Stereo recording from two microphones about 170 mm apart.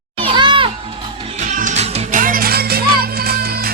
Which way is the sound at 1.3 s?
45° right (ahead or behind).